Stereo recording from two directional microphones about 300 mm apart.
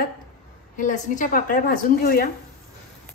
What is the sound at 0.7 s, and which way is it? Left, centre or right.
A woman's voice, left.